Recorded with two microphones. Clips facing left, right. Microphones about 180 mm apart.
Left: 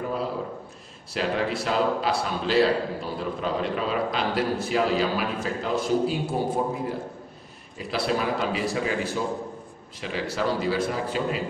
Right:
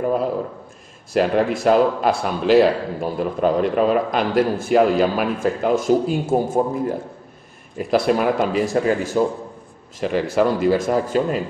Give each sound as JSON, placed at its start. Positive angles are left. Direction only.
{"t": 1.1, "sound": "a man's voice", "side_deg": -50}
{"t": 7.7, "sound": "a man's voice", "side_deg": -50}